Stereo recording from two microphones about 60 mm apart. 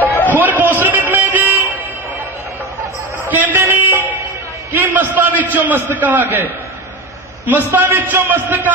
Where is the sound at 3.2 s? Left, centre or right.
Right.